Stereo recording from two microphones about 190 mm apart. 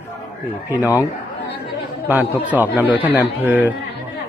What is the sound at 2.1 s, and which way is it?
A man's voice, 10° right (ahead or behind).